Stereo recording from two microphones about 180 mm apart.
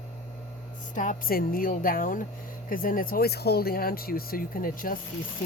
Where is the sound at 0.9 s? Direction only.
50° left (ahead or behind).